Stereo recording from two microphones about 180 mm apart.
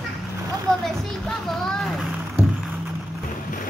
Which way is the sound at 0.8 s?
Centre (ahead or behind).